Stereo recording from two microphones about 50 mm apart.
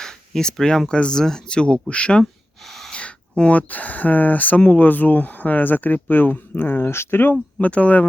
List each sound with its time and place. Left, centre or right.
0.0 s a sound: centre
0.9 s speech: centre
2.6 s gasp: centre
2.9 s speech: left
7.6 s speech: left